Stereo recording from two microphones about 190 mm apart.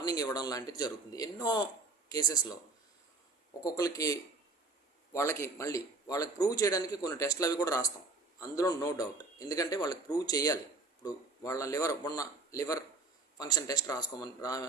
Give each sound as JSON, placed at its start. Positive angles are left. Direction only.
{"t": 0.0, "sound": "speech", "side_deg": 20}
{"t": 3.6, "sound": "a man's voice", "side_deg": 20}